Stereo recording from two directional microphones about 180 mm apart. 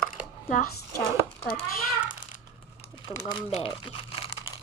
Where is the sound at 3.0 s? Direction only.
30° left (ahead or behind).